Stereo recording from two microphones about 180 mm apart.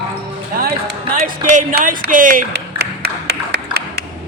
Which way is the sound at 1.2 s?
50° right (ahead or behind).